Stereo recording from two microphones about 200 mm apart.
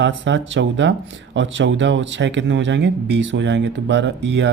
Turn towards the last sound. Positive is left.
turn(degrees=-65)  # may be behind; listen again after turning